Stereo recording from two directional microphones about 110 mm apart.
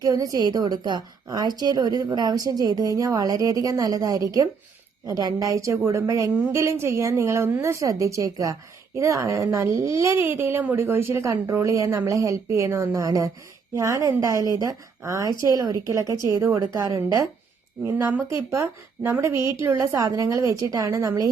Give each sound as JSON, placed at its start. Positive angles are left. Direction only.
{"t": 0.0, "sound": "a woman's voice", "side_deg": -35}